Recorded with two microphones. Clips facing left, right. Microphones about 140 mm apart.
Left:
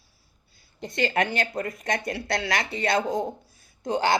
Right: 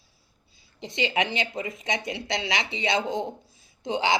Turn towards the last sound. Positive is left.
turn(degrees=50)  # may be behind; listen again after turning